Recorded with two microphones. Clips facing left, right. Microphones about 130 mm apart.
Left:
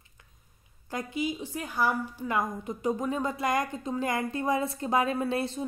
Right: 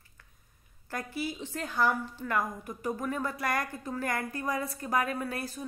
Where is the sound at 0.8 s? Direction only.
15° left (ahead or behind).